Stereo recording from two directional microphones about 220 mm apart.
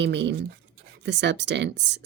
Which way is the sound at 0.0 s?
50° right (ahead or behind).